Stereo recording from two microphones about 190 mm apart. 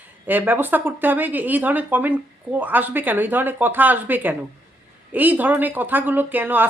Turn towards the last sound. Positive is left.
turn(degrees=-10)  # may be behind; listen again after turning